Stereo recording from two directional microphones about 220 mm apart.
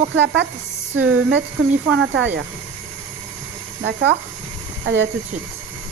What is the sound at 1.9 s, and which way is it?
Speech, 60° right (ahead or behind).